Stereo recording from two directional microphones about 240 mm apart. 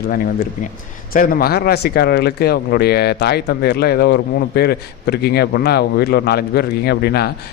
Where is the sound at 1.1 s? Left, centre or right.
Left.